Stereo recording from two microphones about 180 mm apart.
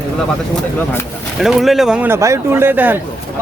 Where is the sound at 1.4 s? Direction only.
Centre (ahead or behind).